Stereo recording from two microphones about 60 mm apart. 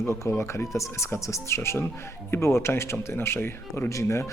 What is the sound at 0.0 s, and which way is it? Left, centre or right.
Speech, left.